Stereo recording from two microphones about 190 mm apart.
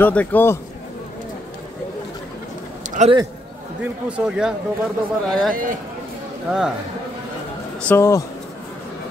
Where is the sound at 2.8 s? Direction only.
40° right (ahead or behind).